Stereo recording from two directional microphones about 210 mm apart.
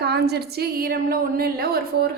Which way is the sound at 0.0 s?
50° right (ahead or behind).